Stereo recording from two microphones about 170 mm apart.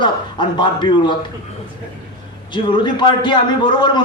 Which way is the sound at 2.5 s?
30° left (ahead or behind).